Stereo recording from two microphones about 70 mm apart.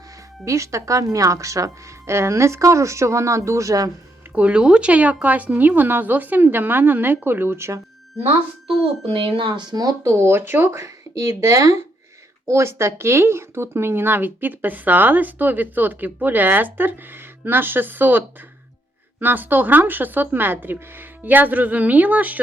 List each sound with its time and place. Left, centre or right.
0.4 s a woman's voice: right
4.4 s speech: centre; by 7.8 s right
9.6 s speech: right
10.0 s a woman's voice: right
19.2 s speech: right